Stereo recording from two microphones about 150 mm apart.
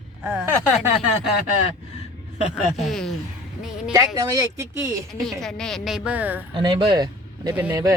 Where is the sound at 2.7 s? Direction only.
Centre (ahead or behind).